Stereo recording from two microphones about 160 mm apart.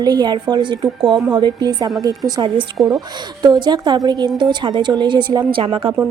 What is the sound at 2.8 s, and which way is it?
Speech, centre (ahead or behind).